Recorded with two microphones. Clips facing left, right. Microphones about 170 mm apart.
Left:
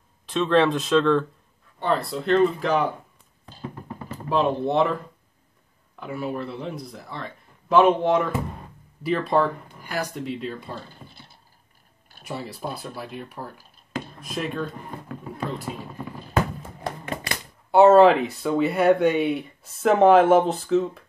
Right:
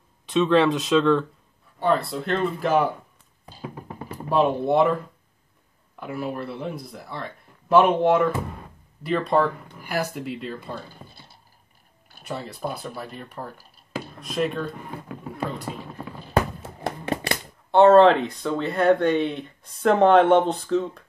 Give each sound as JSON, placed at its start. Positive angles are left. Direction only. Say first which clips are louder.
{"t": 0.3, "sound": "speech", "louder": "right 1 dB", "side_deg": 0}
{"t": 4.3, "sound": "speech", "louder": "right 2 dB", "side_deg": -5}
{"t": 5.9, "sound": "speech", "louder": "even", "side_deg": -5}
{"t": 12.9, "sound": "speech", "louder": "left 1 dB", "side_deg": 5}
{"t": 13.9, "sound": "a sound", "louder": "right 3 dB", "side_deg": 0}
{"t": 16.8, "sound": "music", "louder": "right 4 dB", "side_deg": -30}
{"t": 17.6, "sound": "speech", "louder": "even", "side_deg": 5}